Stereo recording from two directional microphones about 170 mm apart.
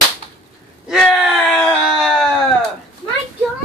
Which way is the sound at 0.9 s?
5° right (ahead or behind).